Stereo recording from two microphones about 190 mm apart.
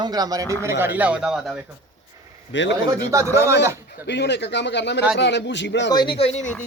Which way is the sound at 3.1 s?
15° right (ahead or behind).